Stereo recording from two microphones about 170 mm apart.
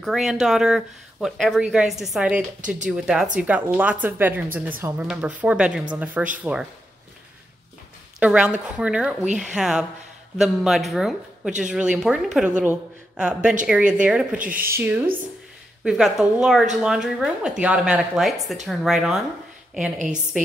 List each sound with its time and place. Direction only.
0.0 s a woman's voice: centre (ahead or behind)
8.2 s a woman's voice: 5° right (ahead or behind)
14.4 s speech: 55° right (ahead or behind)
14.7 s a woman's voice: 10° right (ahead or behind)